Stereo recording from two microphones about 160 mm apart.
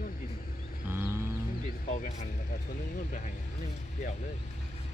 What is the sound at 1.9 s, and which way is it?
Vehicle, 55° left (ahead or behind).